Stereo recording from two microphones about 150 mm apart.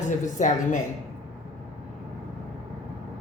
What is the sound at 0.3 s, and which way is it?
Speech, 55° left (ahead or behind).